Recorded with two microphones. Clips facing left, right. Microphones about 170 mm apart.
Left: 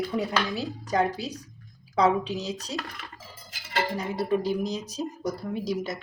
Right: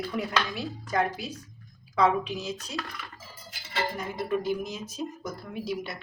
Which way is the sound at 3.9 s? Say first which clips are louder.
Left 3 dB; 35° left (ahead or behind).